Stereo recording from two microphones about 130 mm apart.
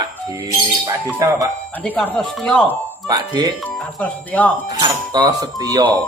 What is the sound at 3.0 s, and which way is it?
Speech, 30° right (ahead or behind).